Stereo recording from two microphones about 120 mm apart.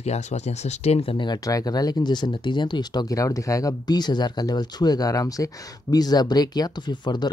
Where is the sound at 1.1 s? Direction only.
40° left (ahead or behind).